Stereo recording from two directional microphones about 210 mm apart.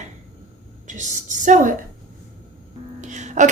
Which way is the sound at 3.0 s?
35° right (ahead or behind).